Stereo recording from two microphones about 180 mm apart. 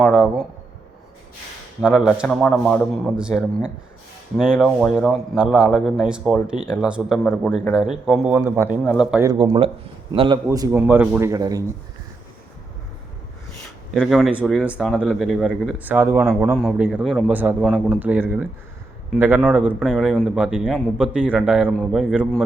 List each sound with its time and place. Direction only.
0.0 s speech: 5° right (ahead or behind)
1.8 s a man's voice: 5° right (ahead or behind)
8.4 s a man's voice: 15° right (ahead or behind)
13.9 s a man's voice: centre (ahead or behind)
17.7 s a man's voice: 5° left (ahead or behind)
18.0 s a man's voice: 10° right (ahead or behind)